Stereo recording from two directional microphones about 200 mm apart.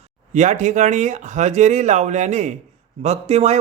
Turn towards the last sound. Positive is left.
turn(degrees=-35)  # may be behind; listen again after turning